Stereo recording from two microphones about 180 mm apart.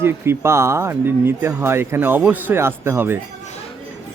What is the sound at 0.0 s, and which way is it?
Speech, 15° right (ahead or behind).